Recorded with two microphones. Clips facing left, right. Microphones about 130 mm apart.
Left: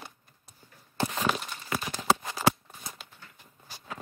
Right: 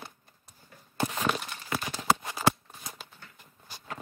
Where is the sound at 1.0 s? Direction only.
Centre (ahead or behind).